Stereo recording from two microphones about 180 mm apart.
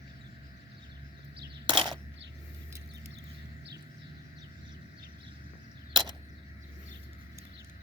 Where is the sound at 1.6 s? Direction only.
25° right (ahead or behind).